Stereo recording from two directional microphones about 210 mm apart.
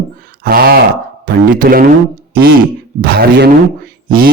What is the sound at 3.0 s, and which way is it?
A man's voice, 50° right (ahead or behind).